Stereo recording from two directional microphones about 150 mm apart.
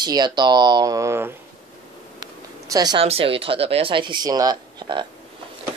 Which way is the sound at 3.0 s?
40° right (ahead or behind).